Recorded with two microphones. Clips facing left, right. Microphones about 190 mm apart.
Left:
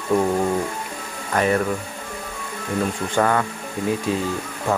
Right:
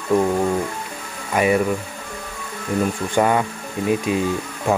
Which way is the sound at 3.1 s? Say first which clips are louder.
Right 2 dB; 15° right (ahead or behind).